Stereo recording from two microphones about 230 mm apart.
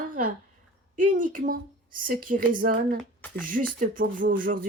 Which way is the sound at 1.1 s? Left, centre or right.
Right.